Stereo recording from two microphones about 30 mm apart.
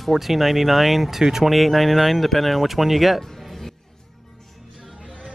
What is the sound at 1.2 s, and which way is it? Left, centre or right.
Speech, centre.